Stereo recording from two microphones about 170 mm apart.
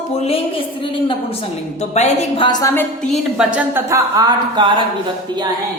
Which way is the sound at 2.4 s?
25° left (ahead or behind).